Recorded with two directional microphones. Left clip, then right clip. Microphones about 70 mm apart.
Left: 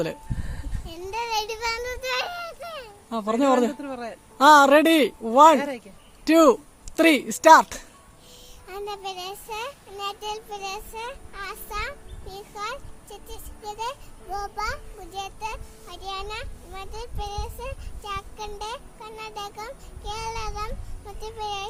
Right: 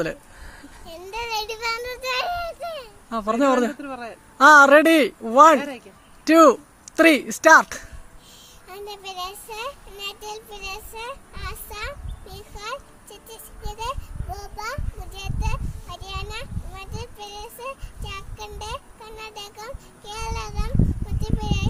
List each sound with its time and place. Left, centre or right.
0.9 s a child's voice: left
8.6 s a child's voice: left